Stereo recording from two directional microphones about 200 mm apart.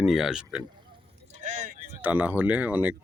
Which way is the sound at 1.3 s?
40° right (ahead or behind).